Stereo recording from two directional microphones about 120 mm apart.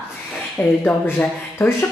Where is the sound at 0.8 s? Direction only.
15° left (ahead or behind).